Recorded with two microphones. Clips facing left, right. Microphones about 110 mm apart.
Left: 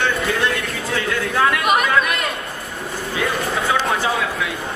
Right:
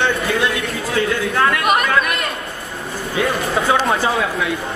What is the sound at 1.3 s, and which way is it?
Chatter, centre (ahead or behind).